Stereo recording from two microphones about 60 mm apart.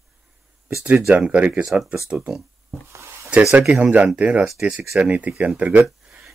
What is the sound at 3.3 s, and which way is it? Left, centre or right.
Speech, centre.